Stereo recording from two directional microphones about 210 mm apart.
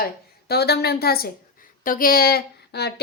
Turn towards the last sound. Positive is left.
turn(degrees=50)  # may be behind; listen again after turning